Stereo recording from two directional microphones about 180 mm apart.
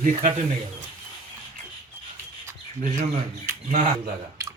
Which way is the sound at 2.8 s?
45° right (ahead or behind).